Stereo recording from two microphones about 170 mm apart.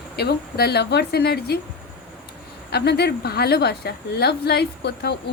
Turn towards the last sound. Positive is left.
turn(degrees=75)  # may be behind; listen again after turning